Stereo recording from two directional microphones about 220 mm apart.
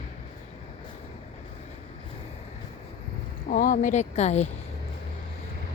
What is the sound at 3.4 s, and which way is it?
Speech, 35° left (ahead or behind).